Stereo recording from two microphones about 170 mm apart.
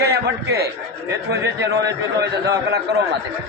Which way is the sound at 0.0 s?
70° right (ahead or behind).